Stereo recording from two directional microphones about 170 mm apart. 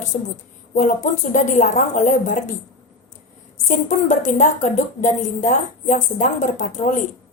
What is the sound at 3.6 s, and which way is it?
A woman's voice, 45° left (ahead or behind).